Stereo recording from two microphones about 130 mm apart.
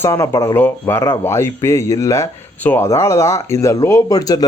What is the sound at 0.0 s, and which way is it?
A man's voice, 25° left (ahead or behind).